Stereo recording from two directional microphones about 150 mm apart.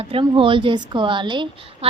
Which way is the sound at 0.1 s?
35° right (ahead or behind).